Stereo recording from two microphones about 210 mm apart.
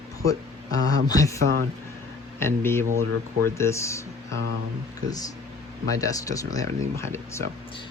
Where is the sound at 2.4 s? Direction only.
10° left (ahead or behind).